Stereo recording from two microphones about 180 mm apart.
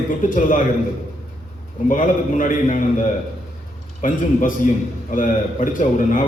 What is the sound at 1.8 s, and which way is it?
A man's voice, 50° left (ahead or behind).